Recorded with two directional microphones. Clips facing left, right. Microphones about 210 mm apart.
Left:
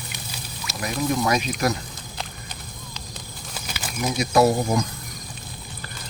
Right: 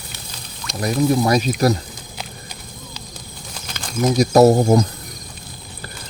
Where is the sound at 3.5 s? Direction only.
5° left (ahead or behind).